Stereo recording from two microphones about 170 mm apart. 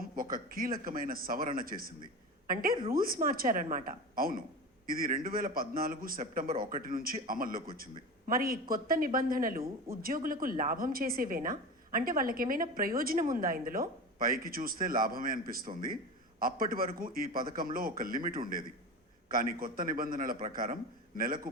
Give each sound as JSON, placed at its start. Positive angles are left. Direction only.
{"t": 0.0, "sound": "a man's voice", "side_deg": -55}